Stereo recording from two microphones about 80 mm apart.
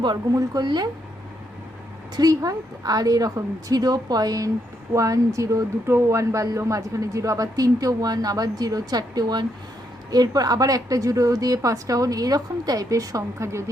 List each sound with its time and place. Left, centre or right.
0.0 s speech: right
2.1 s speech: right